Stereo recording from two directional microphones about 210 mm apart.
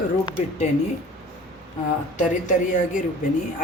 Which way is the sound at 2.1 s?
35° left (ahead or behind).